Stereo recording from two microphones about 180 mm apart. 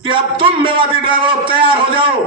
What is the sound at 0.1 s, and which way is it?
A man's voice, 30° right (ahead or behind).